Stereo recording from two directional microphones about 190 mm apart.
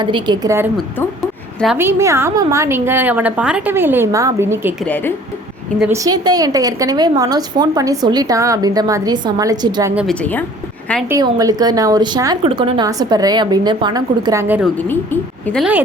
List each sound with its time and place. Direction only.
0.0 s a woman's voice: 25° right (ahead or behind)
4.8 s a woman's voice: 10° left (ahead or behind)
5.9 s a woman's voice: 20° right (ahead or behind)
9.9 s a woman's voice: 5° right (ahead or behind)
10.2 s a woman's voice: 10° left (ahead or behind)
11.1 s a woman's voice: 20° right (ahead or behind)
14.8 s a woman's voice: 10° left (ahead or behind)